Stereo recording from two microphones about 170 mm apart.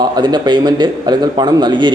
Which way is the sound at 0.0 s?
25° right (ahead or behind).